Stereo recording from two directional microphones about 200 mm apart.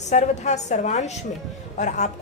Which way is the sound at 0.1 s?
35° left (ahead or behind).